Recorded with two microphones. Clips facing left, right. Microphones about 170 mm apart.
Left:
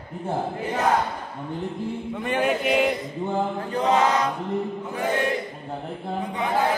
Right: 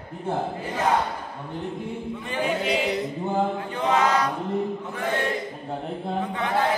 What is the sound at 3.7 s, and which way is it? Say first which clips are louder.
Chant: left 2 dB; 35° left (ahead or behind).